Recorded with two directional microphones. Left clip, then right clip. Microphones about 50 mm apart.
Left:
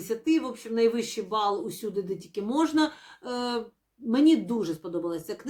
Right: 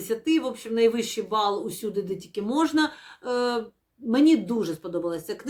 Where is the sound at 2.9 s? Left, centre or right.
Centre.